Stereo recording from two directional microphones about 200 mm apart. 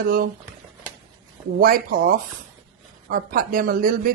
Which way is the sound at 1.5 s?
45° right (ahead or behind).